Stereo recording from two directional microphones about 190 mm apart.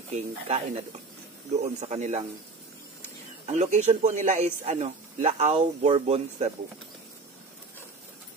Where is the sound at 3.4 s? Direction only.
35° right (ahead or behind).